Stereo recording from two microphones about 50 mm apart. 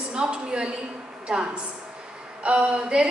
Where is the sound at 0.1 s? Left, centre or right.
Centre.